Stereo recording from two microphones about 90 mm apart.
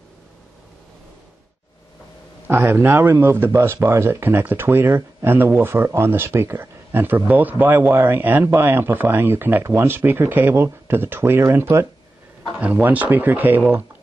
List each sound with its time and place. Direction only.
2.4 s speech: 25° right (ahead or behind)
12.5 s speech: 15° right (ahead or behind)